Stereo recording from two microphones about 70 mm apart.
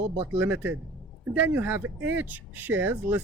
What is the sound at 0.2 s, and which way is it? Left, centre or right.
Speech, right.